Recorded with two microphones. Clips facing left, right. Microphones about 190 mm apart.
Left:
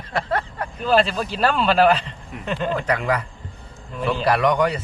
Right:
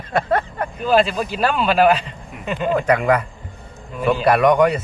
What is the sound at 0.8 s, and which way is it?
Speech, 5° right (ahead or behind).